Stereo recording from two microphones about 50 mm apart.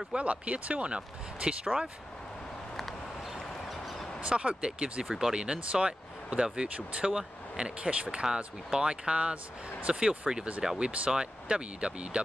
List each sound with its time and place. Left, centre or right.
0.1 s speech: right
3.7 s a sound: centre
4.2 s speech: right